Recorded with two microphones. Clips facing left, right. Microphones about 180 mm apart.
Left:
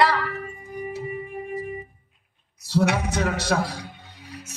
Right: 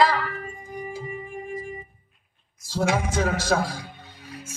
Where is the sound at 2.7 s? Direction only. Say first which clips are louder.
Left 2 dB; 65° left (ahead or behind).